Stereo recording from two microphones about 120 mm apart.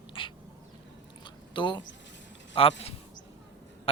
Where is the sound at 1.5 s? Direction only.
40° left (ahead or behind).